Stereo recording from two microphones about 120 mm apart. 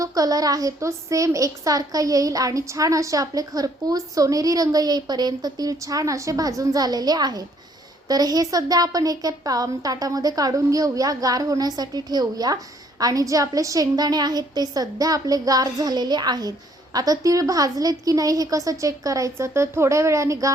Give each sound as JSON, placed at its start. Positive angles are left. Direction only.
{"t": 0.0, "sound": "a woman's voice", "side_deg": -30}